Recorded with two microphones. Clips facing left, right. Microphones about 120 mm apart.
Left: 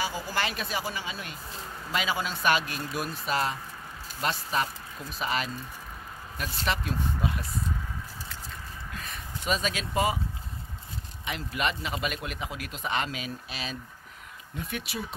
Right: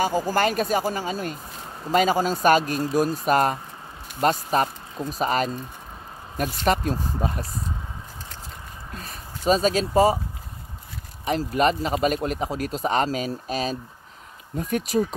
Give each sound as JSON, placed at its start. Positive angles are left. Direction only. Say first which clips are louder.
{"t": 0.0, "sound": "speech", "louder": "right 9 dB", "side_deg": -45}
{"t": 6.6, "sound": "speech", "louder": "right 7 dB", "side_deg": -45}
{"t": 8.5, "sound": "a sound", "louder": "right 2 dB", "side_deg": -35}
{"t": 11.2, "sound": "speech", "louder": "right 10 dB", "side_deg": -40}